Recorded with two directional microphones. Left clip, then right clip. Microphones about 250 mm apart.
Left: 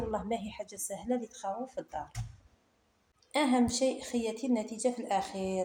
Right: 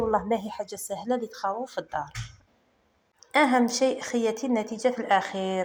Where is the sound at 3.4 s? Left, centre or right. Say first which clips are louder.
Right 6 dB; right.